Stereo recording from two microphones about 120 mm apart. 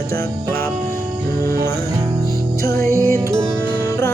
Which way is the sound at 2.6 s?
25° left (ahead or behind).